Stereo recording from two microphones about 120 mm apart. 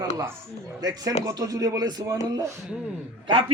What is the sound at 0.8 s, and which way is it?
Speech, 30° right (ahead or behind).